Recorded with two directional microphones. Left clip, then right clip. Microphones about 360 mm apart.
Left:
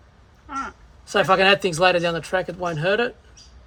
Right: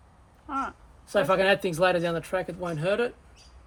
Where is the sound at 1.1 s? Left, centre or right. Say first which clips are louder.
Left 6 dB; left.